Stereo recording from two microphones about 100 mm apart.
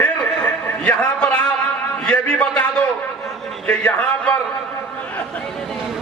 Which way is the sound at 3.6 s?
15° left (ahead or behind).